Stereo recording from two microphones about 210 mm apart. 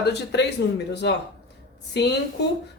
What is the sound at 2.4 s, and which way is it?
Speech, 55° left (ahead or behind).